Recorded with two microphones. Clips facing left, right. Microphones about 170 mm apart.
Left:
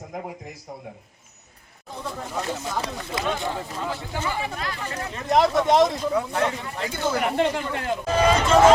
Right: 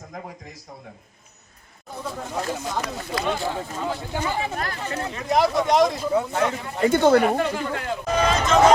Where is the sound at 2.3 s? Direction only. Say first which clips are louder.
Right 1 dB; 15° right (ahead or behind).